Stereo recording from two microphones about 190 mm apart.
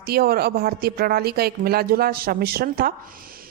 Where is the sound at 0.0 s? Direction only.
55° right (ahead or behind).